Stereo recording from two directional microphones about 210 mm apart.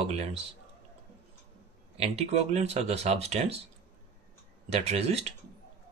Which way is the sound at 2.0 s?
30° right (ahead or behind).